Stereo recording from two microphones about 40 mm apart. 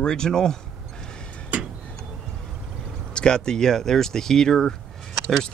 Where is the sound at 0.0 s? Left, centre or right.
Centre.